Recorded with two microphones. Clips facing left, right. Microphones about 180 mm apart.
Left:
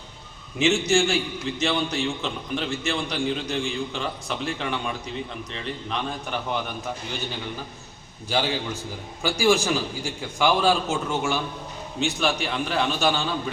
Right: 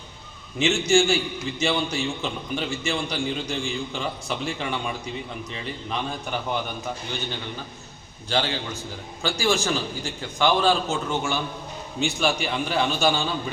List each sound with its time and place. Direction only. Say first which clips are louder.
0.6 s a man's voice: right 1 dB; 5° left (ahead or behind)
8.3 s a man's voice: left 1 dB; 10° left (ahead or behind)